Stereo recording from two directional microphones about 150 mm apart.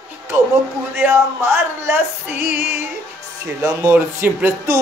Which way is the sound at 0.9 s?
15° right (ahead or behind).